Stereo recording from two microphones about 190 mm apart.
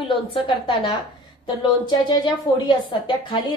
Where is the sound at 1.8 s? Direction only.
25° left (ahead or behind).